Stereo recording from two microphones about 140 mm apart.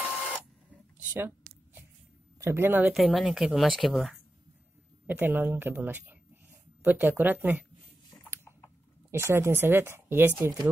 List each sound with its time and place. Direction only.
0.9 s a sound: 15° right (ahead or behind)
2.4 s speech: 15° right (ahead or behind)
2.9 s speech: centre (ahead or behind)
5.0 s speech: 15° right (ahead or behind)
9.1 s speech: 20° right (ahead or behind)